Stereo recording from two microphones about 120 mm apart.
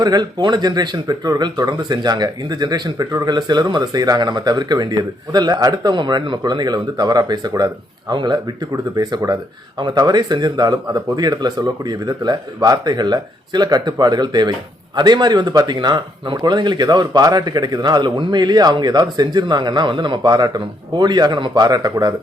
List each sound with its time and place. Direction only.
0.0 s speech: 35° right (ahead or behind)